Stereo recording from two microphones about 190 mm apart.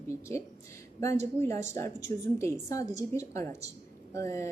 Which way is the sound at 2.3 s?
15° left (ahead or behind).